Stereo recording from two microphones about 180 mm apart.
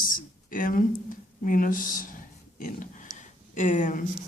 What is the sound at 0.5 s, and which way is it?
Speech, 50° left (ahead or behind).